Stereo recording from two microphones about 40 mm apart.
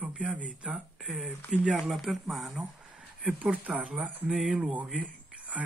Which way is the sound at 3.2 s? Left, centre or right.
Right.